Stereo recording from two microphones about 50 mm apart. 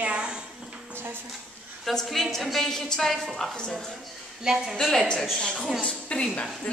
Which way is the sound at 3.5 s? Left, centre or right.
Centre.